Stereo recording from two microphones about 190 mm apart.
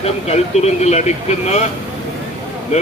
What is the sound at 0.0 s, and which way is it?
A man's voice, 35° left (ahead or behind).